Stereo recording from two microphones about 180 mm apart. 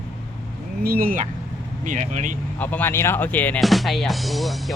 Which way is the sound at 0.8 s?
55° right (ahead or behind).